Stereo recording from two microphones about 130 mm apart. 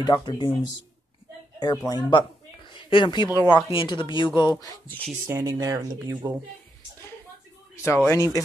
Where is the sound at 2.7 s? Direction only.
40° left (ahead or behind).